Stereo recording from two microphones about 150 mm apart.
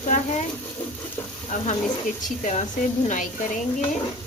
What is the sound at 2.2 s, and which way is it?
Speech, 50° left (ahead or behind).